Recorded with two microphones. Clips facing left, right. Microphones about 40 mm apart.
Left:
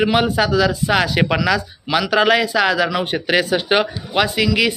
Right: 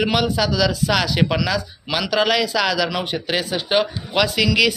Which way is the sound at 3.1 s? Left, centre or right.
Left.